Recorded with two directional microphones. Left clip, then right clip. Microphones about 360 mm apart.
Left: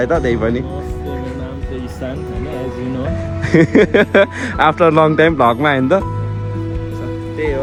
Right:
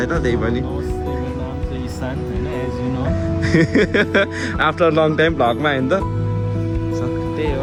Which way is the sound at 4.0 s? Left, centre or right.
Centre.